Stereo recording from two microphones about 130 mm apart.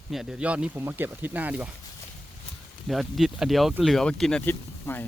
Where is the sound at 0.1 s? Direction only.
5° right (ahead or behind).